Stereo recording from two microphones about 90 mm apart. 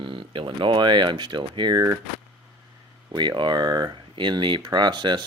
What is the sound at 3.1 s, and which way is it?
Speech, 55° right (ahead or behind).